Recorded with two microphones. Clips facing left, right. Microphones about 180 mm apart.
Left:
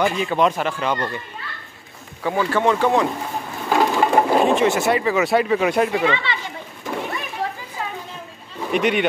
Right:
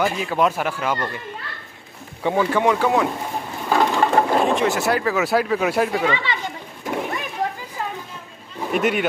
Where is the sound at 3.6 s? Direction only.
10° left (ahead or behind).